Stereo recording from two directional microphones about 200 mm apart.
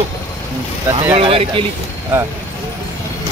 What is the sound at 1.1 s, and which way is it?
Speech, 30° right (ahead or behind).